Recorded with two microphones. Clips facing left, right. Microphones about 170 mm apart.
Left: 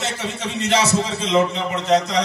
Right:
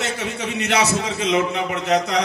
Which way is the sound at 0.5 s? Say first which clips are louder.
Left 2 dB; 70° right (ahead or behind).